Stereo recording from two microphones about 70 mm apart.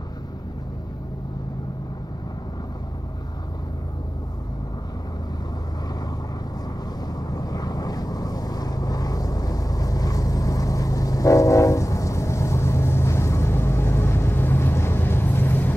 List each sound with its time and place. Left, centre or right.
7.2 s boat: left